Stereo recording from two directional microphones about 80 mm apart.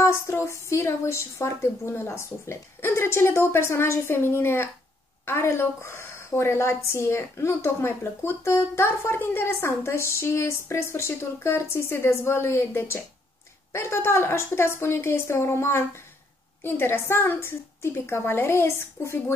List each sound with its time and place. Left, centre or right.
0.0 s a woman's voice: left